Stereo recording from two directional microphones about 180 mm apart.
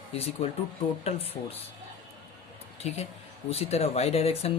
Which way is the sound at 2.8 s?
40° left (ahead or behind).